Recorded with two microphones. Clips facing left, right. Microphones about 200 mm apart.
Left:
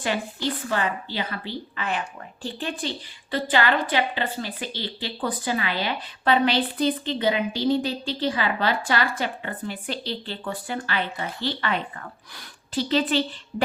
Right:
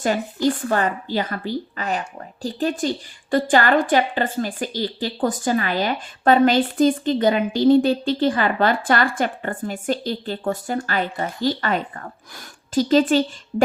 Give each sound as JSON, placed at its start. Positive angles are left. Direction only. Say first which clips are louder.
{"t": 0.0, "sound": "a woman's voice", "louder": "right 7 dB", "side_deg": -45}